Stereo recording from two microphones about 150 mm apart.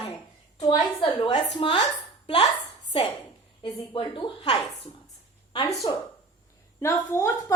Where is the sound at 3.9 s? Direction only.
35° left (ahead or behind).